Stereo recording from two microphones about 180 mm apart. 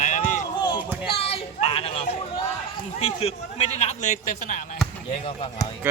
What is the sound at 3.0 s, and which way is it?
A man's voice, 35° left (ahead or behind).